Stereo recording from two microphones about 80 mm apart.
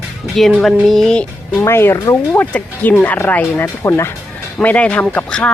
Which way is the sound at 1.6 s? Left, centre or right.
Left.